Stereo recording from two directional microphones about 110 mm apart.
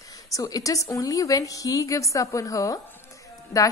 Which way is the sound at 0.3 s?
30° left (ahead or behind).